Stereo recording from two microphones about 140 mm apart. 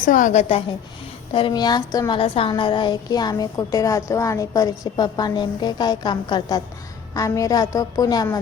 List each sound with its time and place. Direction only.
0.0 s a woman's voice: 70° left (ahead or behind)
1.3 s a woman's voice: 35° left (ahead or behind)